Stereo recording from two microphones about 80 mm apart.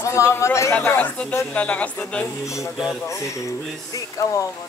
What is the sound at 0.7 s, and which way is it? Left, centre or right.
Speech, centre.